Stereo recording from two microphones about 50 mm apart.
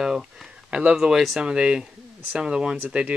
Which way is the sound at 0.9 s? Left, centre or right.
Centre.